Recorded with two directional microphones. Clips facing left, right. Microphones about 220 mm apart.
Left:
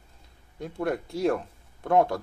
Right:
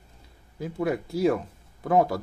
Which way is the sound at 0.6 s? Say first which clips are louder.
Right 2 dB; centre (ahead or behind).